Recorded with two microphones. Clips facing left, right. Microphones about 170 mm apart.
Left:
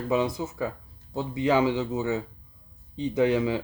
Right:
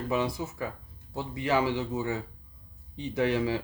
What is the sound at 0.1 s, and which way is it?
Speech, 20° left (ahead or behind).